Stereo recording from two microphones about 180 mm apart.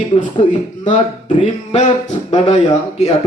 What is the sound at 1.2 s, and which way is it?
Speech, 35° left (ahead or behind).